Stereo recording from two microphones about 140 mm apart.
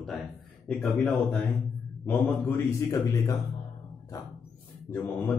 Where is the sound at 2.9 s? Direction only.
25° left (ahead or behind).